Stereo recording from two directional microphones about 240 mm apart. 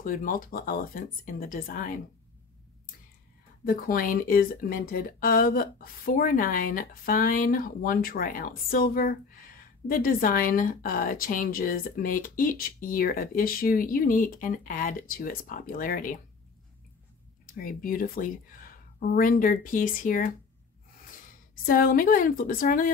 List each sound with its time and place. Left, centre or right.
0.0 s speech: left
3.6 s speech: left
17.6 s speech: left
21.6 s speech: left